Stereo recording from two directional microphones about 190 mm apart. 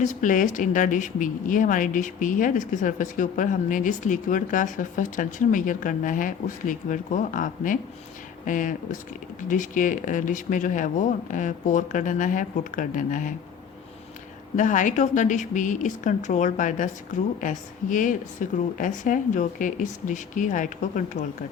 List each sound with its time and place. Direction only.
0.0 s speech: 40° left (ahead or behind)
14.5 s a woman's voice: 40° left (ahead or behind)